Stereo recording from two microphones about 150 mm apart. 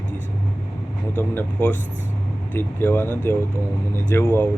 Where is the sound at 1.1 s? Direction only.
15° left (ahead or behind).